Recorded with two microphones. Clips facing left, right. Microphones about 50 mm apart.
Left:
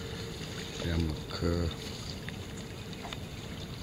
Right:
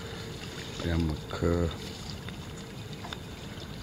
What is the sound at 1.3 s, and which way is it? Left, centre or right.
Speech, centre.